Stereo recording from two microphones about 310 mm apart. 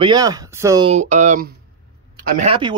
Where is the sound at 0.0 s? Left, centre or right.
Centre.